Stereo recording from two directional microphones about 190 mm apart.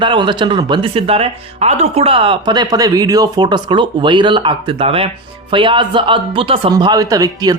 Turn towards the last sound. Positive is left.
turn(degrees=-20)  # may be behind; listen again after turning